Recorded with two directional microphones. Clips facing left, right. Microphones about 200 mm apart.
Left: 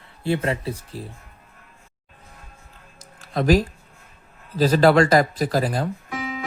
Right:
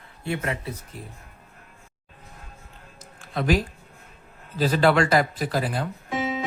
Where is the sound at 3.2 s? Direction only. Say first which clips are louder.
Left 5 dB; 40° left (ahead or behind).